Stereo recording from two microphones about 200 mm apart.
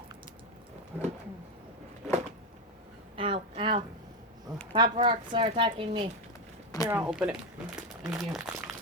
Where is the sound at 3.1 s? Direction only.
25° right (ahead or behind).